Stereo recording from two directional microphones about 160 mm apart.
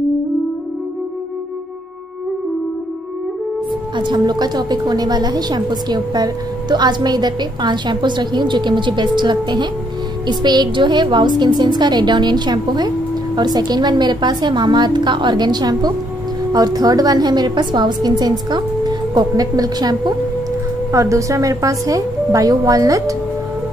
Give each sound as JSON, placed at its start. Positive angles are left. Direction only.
{"t": 3.9, "sound": "a woman's voice", "side_deg": -30}